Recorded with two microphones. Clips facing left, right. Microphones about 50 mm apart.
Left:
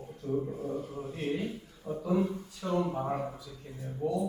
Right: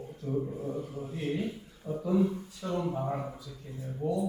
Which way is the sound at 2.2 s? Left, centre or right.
Centre.